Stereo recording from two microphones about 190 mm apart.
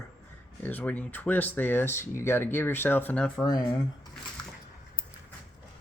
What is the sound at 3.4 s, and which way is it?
Speech, 20° left (ahead or behind).